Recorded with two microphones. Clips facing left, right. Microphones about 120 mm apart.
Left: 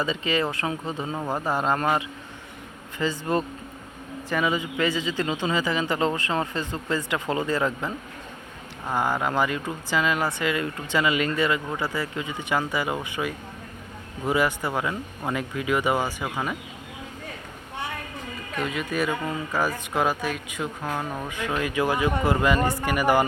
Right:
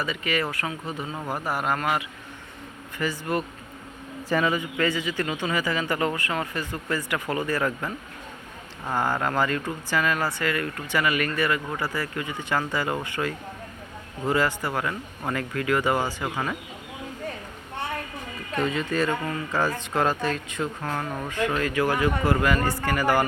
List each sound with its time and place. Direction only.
0.0 s speech: 20° left (ahead or behind)
4.4 s speech: 15° left (ahead or behind)
18.5 s speech: 5° left (ahead or behind)